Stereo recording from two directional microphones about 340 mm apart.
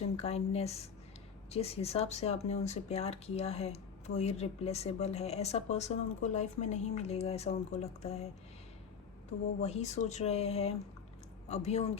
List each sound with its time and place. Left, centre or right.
0.0 s speech: centre
9.6 s speech: centre